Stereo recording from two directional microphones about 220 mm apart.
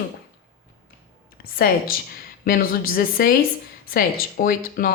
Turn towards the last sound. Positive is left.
turn(degrees=40)  # may be behind; listen again after turning